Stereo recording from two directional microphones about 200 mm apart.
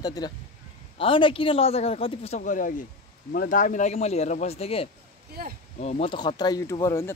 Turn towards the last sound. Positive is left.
turn(degrees=15)  # may be behind; listen again after turning